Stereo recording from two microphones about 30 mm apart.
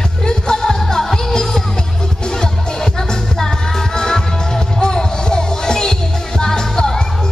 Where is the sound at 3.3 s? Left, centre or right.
Centre.